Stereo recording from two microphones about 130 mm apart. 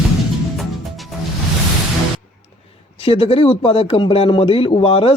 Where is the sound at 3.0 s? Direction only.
45° left (ahead or behind).